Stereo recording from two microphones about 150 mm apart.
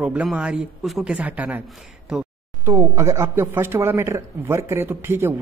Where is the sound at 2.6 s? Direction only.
15° right (ahead or behind).